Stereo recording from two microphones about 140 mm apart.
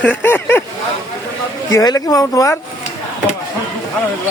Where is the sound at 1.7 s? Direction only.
25° left (ahead or behind).